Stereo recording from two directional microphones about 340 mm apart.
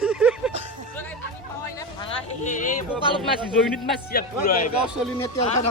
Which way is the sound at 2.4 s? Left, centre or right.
Left.